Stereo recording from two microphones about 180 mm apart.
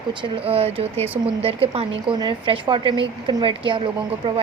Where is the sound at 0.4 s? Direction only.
35° right (ahead or behind).